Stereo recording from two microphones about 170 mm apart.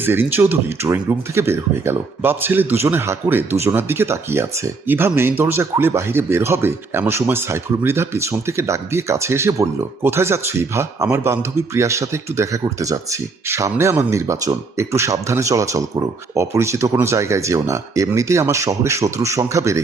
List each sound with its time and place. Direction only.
0.0 s speech: 10° right (ahead or behind)